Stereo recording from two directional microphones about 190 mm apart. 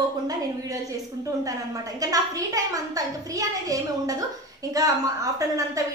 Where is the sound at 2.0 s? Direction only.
20° right (ahead or behind).